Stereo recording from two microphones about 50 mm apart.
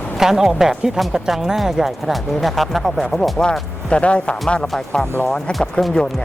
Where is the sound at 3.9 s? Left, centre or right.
Left.